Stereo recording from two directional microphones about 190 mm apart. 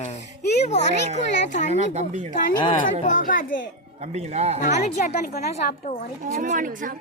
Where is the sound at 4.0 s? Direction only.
35° right (ahead or behind).